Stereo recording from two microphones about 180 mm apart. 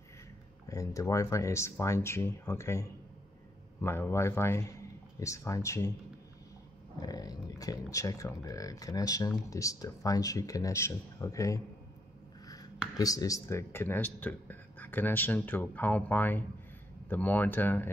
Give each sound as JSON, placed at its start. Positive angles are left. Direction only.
{"t": 0.7, "sound": "speech", "side_deg": 20}
{"t": 7.0, "sound": "speech", "side_deg": 20}
{"t": 12.9, "sound": "speech", "side_deg": 20}